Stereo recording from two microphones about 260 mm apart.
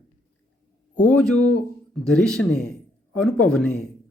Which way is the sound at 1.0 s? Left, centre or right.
Centre.